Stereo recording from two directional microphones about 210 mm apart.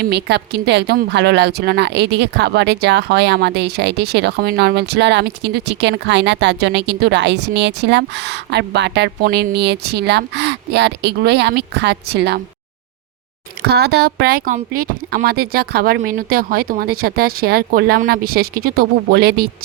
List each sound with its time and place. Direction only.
0.0 s a woman's voice: 50° right (ahead or behind)
13.6 s a woman's voice: 50° right (ahead or behind)